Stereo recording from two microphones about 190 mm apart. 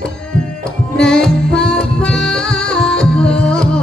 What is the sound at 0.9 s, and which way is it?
Music, 5° left (ahead or behind).